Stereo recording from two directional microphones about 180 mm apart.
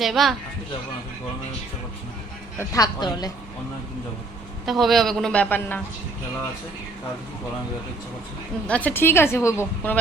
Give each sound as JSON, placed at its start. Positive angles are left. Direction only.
{"t": 0.0, "sound": "a man's voice", "side_deg": 0}
{"t": 2.6, "sound": "a woman's voice", "side_deg": 20}
{"t": 4.6, "sound": "a man's voice", "side_deg": 0}
{"t": 8.6, "sound": "a woman's voice", "side_deg": 10}